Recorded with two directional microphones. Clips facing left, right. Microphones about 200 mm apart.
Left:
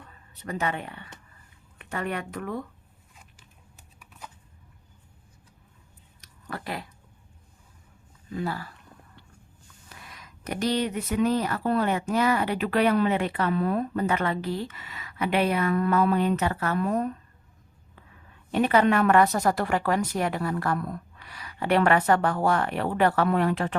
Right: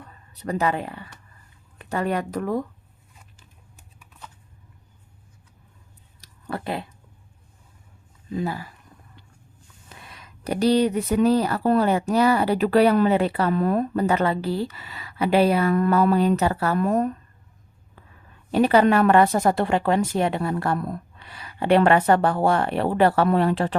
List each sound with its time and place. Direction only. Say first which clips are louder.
0.3 s speech: right 6 dB; 35° right (ahead or behind)
6.2 s a sound: right 6 dB; 30° right (ahead or behind)
8.3 s speech: right 3 dB; 20° right (ahead or behind)
9.9 s speech: right 2 dB; 25° right (ahead or behind); by 17.1 s 45° right (ahead or behind)
18.5 s speech: right 4 dB; 35° right (ahead or behind)